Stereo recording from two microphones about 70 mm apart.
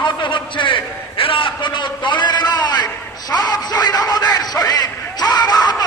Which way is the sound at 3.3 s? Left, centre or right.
Left.